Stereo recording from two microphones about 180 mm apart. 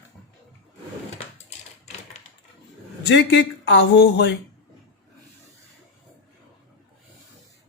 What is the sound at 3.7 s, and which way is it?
Speech, 80° left.